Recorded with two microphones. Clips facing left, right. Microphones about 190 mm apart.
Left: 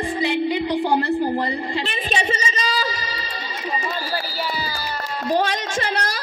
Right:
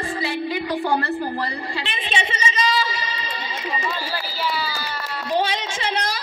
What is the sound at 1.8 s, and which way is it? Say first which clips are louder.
Music: left 3 dB; 40° left (ahead or behind).